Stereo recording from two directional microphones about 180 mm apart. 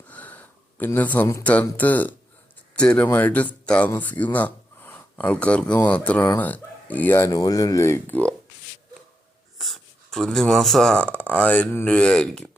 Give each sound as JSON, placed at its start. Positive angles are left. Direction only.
{"t": 0.1, "sound": "speech", "side_deg": 10}
{"t": 9.6, "sound": "speech", "side_deg": 0}